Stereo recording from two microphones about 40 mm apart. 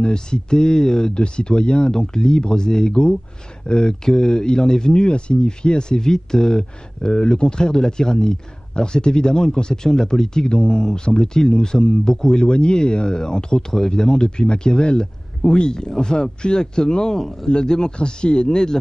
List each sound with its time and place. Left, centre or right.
0.0 s speech: centre
1.1 s speech: left